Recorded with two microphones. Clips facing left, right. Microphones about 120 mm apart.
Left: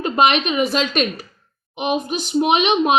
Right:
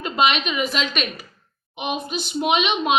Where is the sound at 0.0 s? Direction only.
45° left (ahead or behind).